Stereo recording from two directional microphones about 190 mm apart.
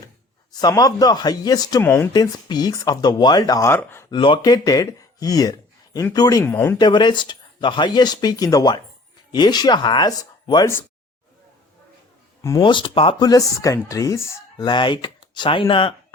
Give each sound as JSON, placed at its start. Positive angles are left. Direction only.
{"t": 0.5, "sound": "speech", "side_deg": 20}
{"t": 4.1, "sound": "speech", "side_deg": 25}
{"t": 6.7, "sound": "speech", "side_deg": 25}
{"t": 12.4, "sound": "speech", "side_deg": 20}